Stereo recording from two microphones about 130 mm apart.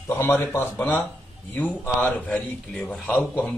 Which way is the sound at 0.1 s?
15° left (ahead or behind).